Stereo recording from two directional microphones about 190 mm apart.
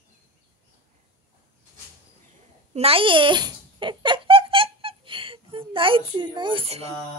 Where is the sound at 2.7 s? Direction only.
30° right (ahead or behind).